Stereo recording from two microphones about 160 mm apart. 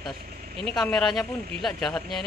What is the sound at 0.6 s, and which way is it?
Speech, 5° left (ahead or behind).